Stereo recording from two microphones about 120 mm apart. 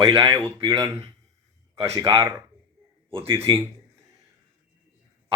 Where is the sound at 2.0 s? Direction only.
35° right (ahead or behind).